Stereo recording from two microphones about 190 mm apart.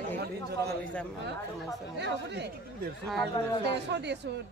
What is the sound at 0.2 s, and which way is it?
Speech, 60° right (ahead or behind).